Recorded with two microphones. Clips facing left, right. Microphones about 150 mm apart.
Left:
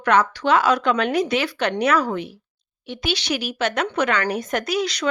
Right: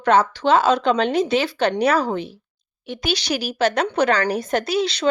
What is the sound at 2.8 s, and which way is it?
Speech, 45° right (ahead or behind).